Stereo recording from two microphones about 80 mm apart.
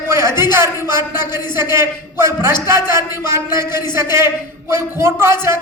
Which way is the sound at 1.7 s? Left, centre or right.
Right.